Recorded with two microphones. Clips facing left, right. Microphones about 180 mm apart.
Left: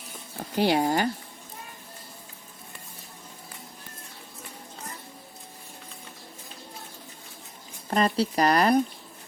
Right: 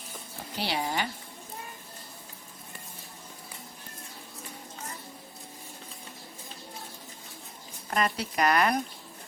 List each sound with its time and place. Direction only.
0.5 s speech: 50° left (ahead or behind)
7.9 s speech: 30° left (ahead or behind)